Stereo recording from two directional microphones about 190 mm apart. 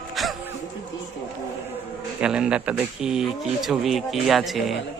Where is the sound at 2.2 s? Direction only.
5° right (ahead or behind).